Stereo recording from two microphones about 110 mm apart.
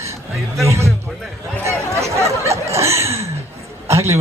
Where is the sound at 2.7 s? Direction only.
25° right (ahead or behind).